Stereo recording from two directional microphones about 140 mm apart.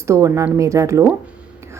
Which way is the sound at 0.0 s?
20° right (ahead or behind).